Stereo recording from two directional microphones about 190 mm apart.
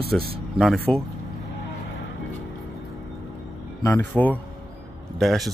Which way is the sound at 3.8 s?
10° left (ahead or behind).